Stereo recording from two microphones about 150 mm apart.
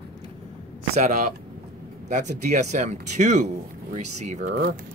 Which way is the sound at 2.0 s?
55° right (ahead or behind).